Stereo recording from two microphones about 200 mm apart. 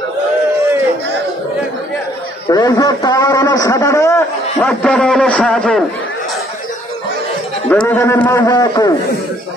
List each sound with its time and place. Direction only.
2.4 s a sound: 20° left (ahead or behind)
4.6 s a man's voice: 5° left (ahead or behind)
7.7 s a man's voice: 5° left (ahead or behind)